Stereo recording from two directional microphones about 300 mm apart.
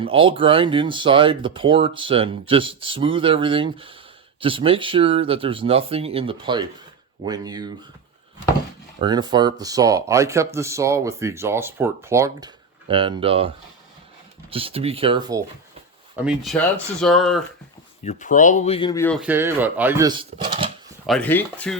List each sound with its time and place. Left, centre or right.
0.0 s speech: centre
9.0 s speech: centre
14.5 s speech: centre
16.1 s speech: centre
18.0 s speech: left; by 20.7 s centre
21.1 s speech: centre